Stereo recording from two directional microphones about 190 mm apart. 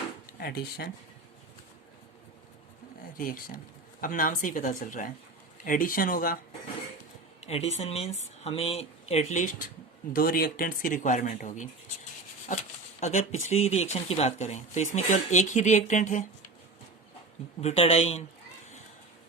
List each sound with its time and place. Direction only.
0.3 s speech: 55° left (ahead or behind)
3.2 s speech: 50° left (ahead or behind)
7.4 s speech: 35° left (ahead or behind)
10.1 s speech: 50° left (ahead or behind)
13.0 s speech: 40° left (ahead or behind)
17.6 s speech: 35° left (ahead or behind)